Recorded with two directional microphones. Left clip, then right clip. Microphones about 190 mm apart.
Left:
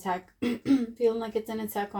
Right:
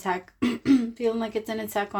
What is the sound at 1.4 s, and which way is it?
Speech, 35° right (ahead or behind).